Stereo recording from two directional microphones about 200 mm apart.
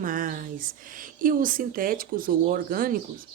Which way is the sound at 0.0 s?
45° right (ahead or behind).